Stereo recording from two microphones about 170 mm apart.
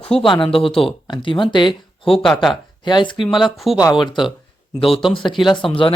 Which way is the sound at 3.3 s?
Centre (ahead or behind).